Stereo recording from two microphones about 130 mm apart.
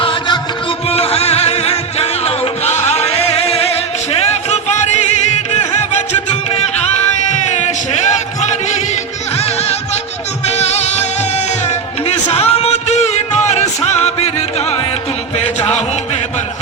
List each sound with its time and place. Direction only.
0.0 s music: 40° left (ahead or behind); by 5.0 s 60° left (ahead or behind)
7.3 s a sound: 60° left (ahead or behind)
10.4 s music: 55° left (ahead or behind)
12.0 s music: 55° left (ahead or behind)